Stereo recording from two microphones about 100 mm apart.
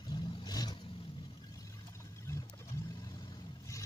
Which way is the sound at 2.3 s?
25° left (ahead or behind).